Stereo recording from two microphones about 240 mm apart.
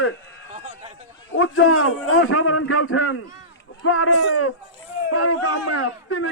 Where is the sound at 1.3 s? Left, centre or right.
Left.